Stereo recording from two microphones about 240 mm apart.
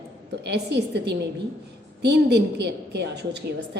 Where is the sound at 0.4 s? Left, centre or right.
Right.